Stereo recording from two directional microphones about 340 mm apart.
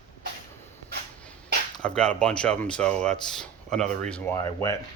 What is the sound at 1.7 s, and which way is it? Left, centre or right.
Speech, centre.